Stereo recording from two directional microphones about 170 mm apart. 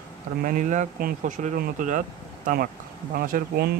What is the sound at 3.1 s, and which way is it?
Speech, 55° right (ahead or behind).